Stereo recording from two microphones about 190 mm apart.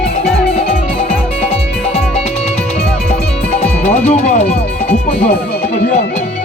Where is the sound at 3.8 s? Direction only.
40° left (ahead or behind).